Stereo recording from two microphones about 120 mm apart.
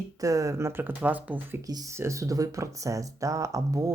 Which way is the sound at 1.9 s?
25° right (ahead or behind).